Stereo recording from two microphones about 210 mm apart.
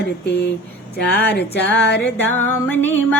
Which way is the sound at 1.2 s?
50° left (ahead or behind).